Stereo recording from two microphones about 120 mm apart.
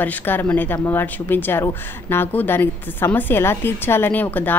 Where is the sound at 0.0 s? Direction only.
15° left (ahead or behind).